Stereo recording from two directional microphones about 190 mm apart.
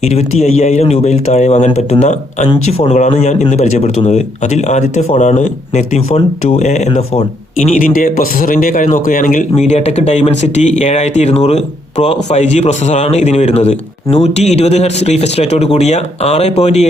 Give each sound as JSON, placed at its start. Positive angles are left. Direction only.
{"t": 0.0, "sound": "speech", "side_deg": 35}